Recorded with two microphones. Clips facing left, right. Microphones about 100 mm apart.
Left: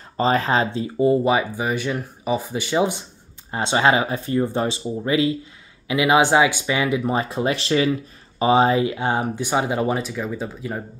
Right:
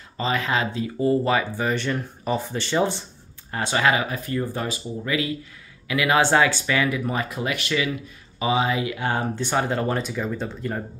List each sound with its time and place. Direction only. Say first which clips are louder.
0.2 s speech: left 5 dB; 35° left (ahead or behind); by 3.0 s 10° left (ahead or behind)
3.5 s speech: left 3 dB; 25° left (ahead or behind); by 10.8 s 5° left (ahead or behind)